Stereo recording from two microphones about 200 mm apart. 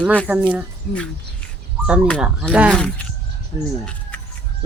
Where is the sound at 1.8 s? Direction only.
5° right (ahead or behind).